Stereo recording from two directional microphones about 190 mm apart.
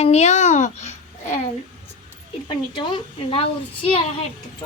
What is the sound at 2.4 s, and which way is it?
A woman's voice, 25° left (ahead or behind).